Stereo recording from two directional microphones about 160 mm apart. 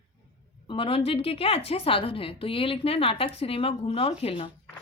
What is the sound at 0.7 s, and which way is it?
Speech, 35° left (ahead or behind).